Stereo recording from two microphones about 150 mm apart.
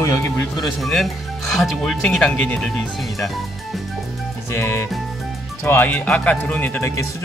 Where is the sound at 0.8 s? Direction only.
Centre (ahead or behind).